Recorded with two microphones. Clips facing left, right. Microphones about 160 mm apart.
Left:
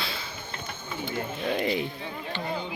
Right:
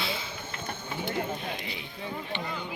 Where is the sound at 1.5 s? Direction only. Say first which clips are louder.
Left 10 dB; 55° left (ahead or behind).